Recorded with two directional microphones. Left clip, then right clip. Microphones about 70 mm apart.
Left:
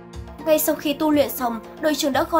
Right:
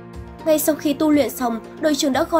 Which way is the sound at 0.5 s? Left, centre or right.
Right.